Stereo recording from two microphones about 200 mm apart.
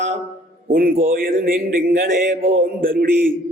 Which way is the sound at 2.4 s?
75° right (ahead or behind).